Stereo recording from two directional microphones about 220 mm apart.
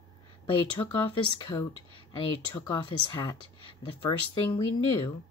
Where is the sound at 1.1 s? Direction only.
20° left (ahead or behind).